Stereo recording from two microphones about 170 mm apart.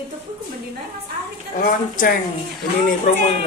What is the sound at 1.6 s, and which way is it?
Speech, 55° left (ahead or behind).